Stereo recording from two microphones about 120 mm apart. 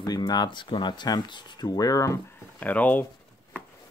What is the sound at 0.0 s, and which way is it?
Speech, 35° left (ahead or behind).